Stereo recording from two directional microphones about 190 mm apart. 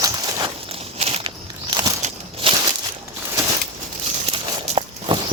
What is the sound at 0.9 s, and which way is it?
Walk, 35° right (ahead or behind).